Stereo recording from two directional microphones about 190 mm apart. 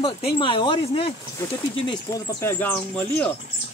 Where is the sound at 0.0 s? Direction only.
30° left (ahead or behind).